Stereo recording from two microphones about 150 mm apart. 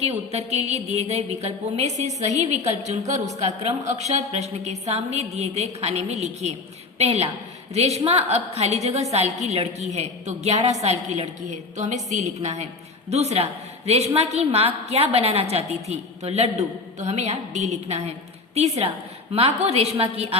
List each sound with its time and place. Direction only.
0.0 s a woman's voice: 45° right (ahead or behind)
19.3 s a woman's voice: 40° right (ahead or behind)